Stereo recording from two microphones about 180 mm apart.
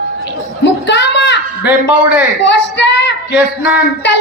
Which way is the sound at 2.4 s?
80° left.